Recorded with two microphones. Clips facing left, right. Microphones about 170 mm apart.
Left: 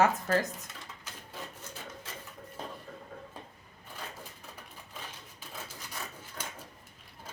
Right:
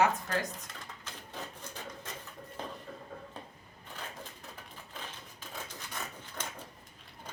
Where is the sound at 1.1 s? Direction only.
10° left (ahead or behind).